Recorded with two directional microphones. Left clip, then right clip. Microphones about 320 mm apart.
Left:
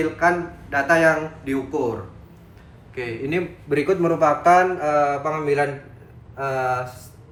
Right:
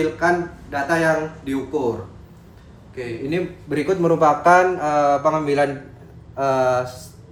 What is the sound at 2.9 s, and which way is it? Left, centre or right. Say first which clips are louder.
Speech: even; centre.